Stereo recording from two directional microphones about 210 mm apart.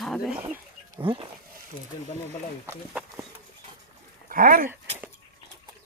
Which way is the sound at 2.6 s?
5° right (ahead or behind).